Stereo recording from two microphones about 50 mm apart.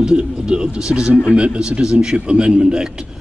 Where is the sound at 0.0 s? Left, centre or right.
Centre.